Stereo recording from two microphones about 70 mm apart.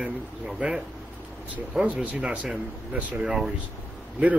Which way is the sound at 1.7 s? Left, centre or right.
Centre.